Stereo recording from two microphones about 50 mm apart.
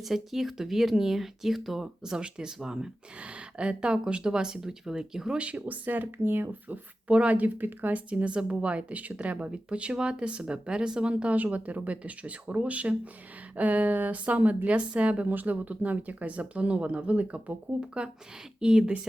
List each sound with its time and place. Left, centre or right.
0.0 s speech: centre
5.5 s speech: right
7.1 s speech: right
8.1 s a woman's voice: right
15.3 s a woman's voice: right; by 18.9 s centre